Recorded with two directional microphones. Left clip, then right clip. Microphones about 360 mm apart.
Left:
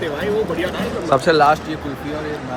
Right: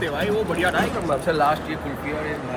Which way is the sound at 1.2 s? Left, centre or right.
Left.